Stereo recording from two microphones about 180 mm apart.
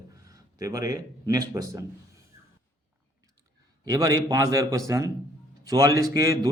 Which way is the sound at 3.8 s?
20° right (ahead or behind).